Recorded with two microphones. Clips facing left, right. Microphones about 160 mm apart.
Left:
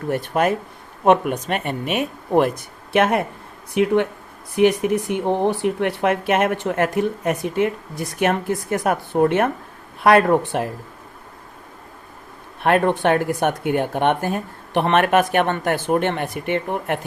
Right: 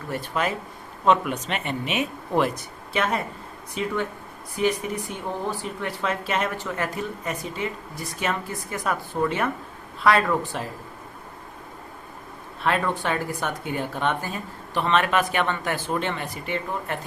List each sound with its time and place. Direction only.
0.1 s speech: 55° left (ahead or behind)
12.6 s speech: 60° left (ahead or behind)